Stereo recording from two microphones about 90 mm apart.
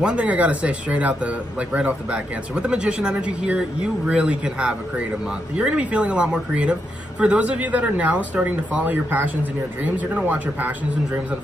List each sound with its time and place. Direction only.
0.0 s a woman's voice: 15° right (ahead or behind)